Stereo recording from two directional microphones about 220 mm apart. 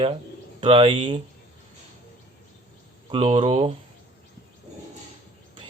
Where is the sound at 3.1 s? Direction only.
25° right (ahead or behind).